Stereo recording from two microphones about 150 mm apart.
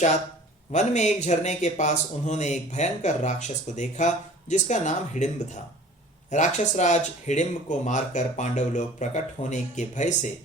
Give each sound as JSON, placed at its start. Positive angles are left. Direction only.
{"t": 0.7, "sound": "speech", "side_deg": 50}
{"t": 6.3, "sound": "speech", "side_deg": 50}